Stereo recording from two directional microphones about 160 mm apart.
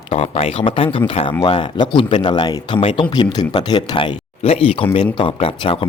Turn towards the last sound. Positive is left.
turn(degrees=35)  # may be behind; listen again after turning